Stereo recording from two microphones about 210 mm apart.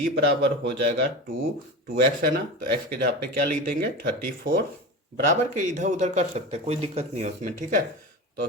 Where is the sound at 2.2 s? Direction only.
45° right (ahead or behind).